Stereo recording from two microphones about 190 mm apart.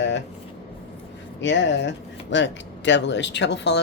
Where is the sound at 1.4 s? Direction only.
70° left (ahead or behind).